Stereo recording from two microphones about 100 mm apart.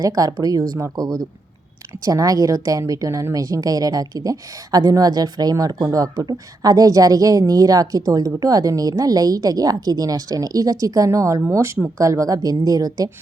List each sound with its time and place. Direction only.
0.0 s a woman's voice: 35° right (ahead or behind)